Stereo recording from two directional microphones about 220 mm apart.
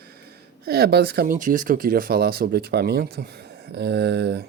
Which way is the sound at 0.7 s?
45° right (ahead or behind).